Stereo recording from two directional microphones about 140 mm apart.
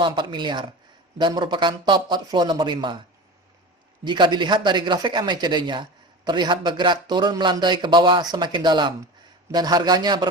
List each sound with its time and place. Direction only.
0.0 s speech: 35° right (ahead or behind)
4.0 s a man's voice: 30° right (ahead or behind)